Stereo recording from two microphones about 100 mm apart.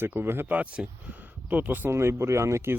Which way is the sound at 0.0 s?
20° right (ahead or behind).